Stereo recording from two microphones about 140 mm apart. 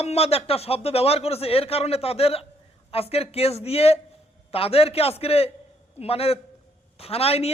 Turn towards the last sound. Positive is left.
turn(degrees=45)  # may be behind; listen again after turning